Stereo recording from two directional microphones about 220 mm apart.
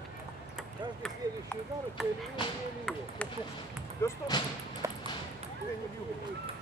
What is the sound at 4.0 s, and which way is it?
Speech, 15° left (ahead or behind).